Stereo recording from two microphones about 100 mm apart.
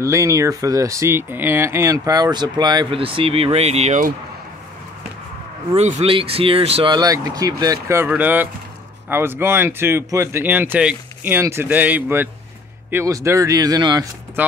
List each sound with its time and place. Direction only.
0.0 s speech: 30° right (ahead or behind)
2.9 s speech: 65° right (ahead or behind); by 3.9 s 90° right
5.8 s speech: 80° right
6.9 s speech: 40° right (ahead or behind)
8.1 s speech: 20° right (ahead or behind)
13.0 s speech: 30° right (ahead or behind)